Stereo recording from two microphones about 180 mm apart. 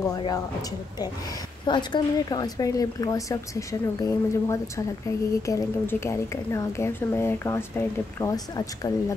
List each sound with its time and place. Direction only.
0.0 s a woman's voice: 20° left (ahead or behind)